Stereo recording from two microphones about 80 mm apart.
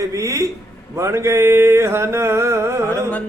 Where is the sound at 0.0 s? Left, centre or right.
Right.